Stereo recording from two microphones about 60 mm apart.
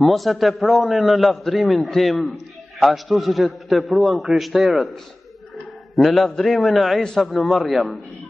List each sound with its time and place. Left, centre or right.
0.0 s a man's voice: centre
5.9 s a man's voice: centre